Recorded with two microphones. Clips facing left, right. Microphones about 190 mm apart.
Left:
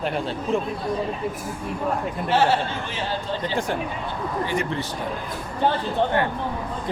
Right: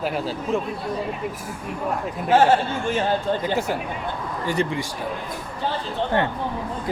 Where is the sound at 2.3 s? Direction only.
50° right (ahead or behind).